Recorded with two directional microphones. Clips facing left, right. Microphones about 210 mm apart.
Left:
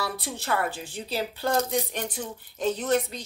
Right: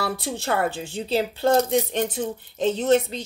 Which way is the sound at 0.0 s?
25° right (ahead or behind).